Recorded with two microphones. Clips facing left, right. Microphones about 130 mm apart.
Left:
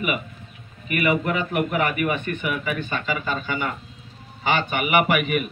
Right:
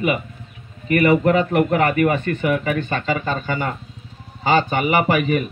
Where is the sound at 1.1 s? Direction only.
30° right (ahead or behind).